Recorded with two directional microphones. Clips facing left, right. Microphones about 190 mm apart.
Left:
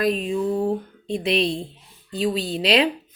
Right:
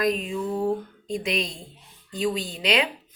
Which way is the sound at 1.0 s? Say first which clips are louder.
Left 7 dB; 30° left (ahead or behind).